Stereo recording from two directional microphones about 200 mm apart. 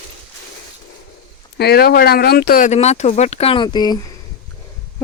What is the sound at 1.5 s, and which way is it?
Speech, 50° left (ahead or behind).